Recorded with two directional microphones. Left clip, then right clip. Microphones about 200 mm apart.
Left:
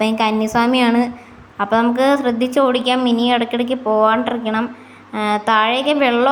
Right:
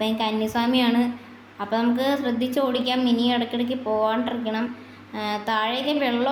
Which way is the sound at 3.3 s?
15° left (ahead or behind).